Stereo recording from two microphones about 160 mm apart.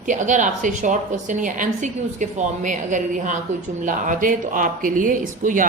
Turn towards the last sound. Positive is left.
turn(degrees=-55)  # may be behind; listen again after turning